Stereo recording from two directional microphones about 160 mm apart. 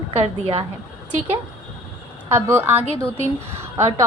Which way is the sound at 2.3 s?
15° right (ahead or behind).